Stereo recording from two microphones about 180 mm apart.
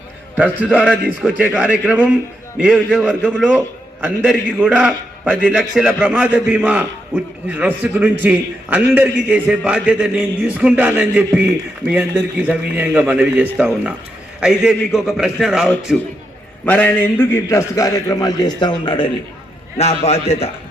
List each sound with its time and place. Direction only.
0.3 s a man's voice: 10° right (ahead or behind)
16.6 s a man's voice: 10° left (ahead or behind); by 20.5 s 35° left (ahead or behind)